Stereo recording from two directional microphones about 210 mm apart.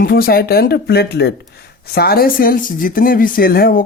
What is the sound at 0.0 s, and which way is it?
Speech, 45° left (ahead or behind).